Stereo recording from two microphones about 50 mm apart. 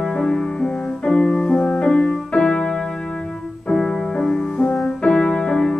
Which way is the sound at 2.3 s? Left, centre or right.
Centre.